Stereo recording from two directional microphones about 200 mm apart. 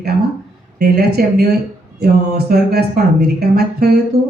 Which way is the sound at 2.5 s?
50° right (ahead or behind).